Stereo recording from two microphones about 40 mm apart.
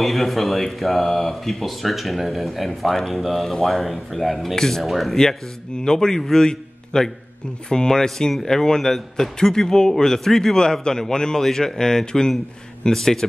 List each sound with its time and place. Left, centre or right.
0.0 s speech: centre
3.8 s speech: centre
4.6 s speech: centre
4.8 s speech: centre
5.9 s a man's voice: centre